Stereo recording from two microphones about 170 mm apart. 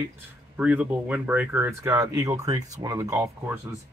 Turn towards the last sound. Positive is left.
turn(degrees=-15)  # may be behind; listen again after turning